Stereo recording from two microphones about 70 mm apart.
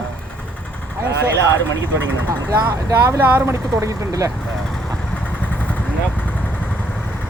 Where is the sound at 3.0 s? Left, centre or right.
Right.